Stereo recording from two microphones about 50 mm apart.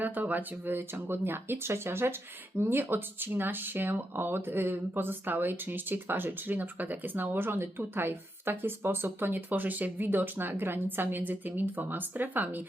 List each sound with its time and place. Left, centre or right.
0.0 s speech: right